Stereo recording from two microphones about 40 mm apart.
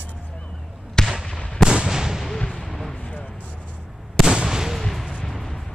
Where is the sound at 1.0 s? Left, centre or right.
Centre.